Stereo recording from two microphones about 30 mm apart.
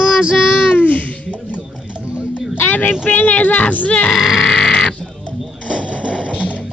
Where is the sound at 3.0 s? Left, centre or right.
Left.